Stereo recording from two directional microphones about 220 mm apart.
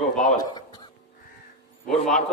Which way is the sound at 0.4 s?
20° left (ahead or behind).